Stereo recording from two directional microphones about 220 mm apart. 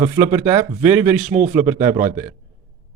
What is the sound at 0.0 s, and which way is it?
Speech, 10° right (ahead or behind).